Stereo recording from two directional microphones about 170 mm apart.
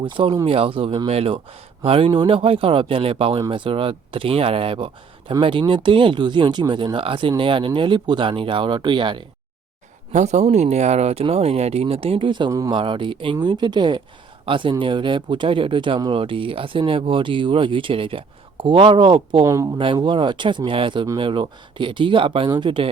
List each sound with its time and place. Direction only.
0.0 s speech: 30° right (ahead or behind)
10.1 s speech: 45° right (ahead or behind); by 19.8 s 20° right (ahead or behind)
19.8 s speech: 30° right (ahead or behind)